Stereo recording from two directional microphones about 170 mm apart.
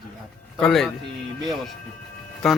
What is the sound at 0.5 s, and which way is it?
Speech, centre (ahead or behind).